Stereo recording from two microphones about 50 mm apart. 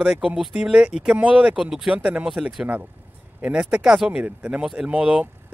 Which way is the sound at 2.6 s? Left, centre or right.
Right.